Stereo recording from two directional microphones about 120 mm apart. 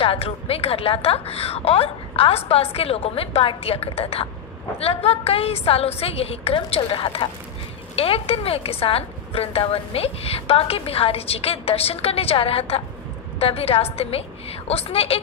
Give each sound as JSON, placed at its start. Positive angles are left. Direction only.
{"t": 0.0, "sound": "a woman's voice", "side_deg": 55}